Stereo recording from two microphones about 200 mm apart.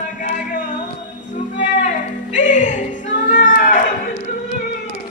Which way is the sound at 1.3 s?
40° left (ahead or behind).